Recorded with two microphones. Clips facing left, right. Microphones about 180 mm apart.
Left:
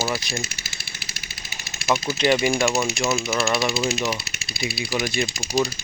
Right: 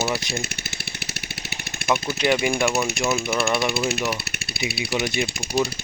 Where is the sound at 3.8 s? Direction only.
60° right (ahead or behind).